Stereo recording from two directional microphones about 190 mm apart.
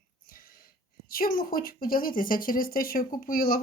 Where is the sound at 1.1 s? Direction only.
50° left (ahead or behind).